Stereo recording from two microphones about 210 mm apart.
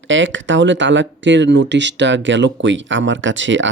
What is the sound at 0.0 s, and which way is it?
Speech, 60° right (ahead or behind).